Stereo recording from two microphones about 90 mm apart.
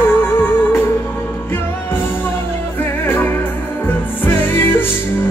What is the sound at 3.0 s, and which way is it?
Music, 25° left (ahead or behind).